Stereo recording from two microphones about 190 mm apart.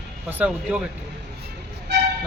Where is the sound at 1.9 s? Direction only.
60° right (ahead or behind).